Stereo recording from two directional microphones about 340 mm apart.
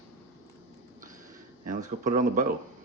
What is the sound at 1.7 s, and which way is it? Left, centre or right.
Speech, right.